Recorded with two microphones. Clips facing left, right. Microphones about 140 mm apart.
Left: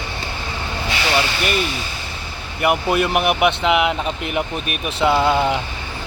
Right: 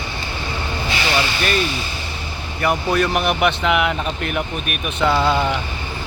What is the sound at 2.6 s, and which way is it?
Speech, 15° left (ahead or behind).